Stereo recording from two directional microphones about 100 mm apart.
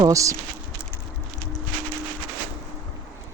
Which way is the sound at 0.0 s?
35° right (ahead or behind).